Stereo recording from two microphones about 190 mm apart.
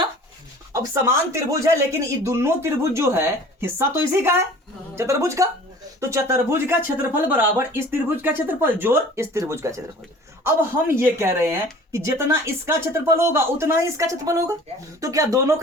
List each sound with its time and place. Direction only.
0.7 s speech: 15° right (ahead or behind)